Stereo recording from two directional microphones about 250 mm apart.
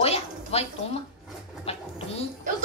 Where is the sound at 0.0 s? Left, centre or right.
Left.